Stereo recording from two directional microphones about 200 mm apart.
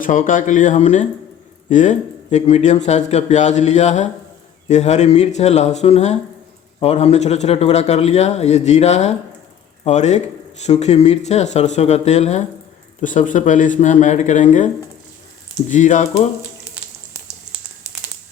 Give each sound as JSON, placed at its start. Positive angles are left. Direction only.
{"t": 0.0, "sound": "speech", "side_deg": 40}
{"t": 15.7, "sound": "speech", "side_deg": 40}